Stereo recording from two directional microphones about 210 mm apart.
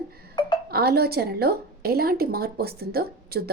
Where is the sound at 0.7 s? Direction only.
50° right (ahead or behind).